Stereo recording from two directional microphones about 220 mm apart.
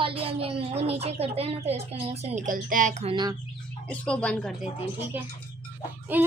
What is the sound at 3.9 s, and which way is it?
Speech, 5° left (ahead or behind).